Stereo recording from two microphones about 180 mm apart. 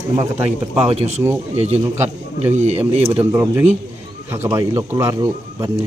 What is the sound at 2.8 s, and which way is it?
A man's voice, 10° right (ahead or behind).